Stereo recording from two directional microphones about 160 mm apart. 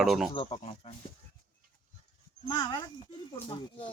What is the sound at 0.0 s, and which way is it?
Speech, 5° right (ahead or behind).